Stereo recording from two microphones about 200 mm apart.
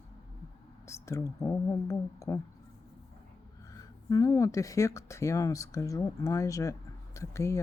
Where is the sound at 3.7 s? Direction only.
15° left (ahead or behind).